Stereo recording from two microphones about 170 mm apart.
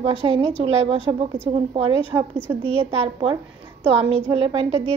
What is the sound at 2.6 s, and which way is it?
A woman's voice, 35° right (ahead or behind).